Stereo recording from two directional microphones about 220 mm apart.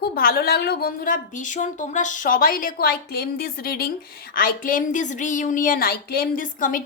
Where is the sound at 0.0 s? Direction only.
40° left (ahead or behind).